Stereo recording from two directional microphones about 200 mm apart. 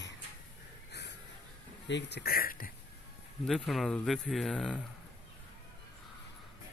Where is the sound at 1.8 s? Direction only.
60° left (ahead or behind).